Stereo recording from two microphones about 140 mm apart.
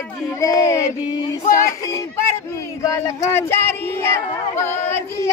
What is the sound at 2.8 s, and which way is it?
Speech, 25° left (ahead or behind).